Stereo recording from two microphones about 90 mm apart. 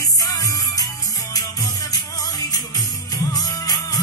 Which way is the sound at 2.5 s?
45° left (ahead or behind).